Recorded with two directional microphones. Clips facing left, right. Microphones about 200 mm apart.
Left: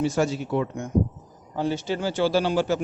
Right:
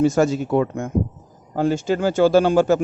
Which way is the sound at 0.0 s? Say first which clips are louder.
Right 6 dB; 45° right (ahead or behind).